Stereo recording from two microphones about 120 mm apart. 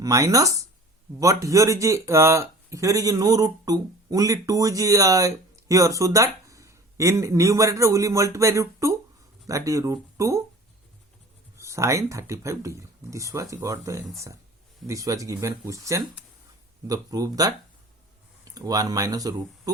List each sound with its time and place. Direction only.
0.0 s speech: 30° right (ahead or behind)
11.5 s speech: 25° right (ahead or behind)